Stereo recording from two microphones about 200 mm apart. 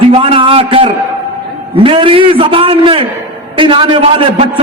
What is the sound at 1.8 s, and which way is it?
A man's voice, 25° right (ahead or behind).